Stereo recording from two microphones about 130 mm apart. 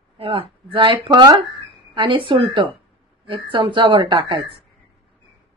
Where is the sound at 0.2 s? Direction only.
45° right (ahead or behind).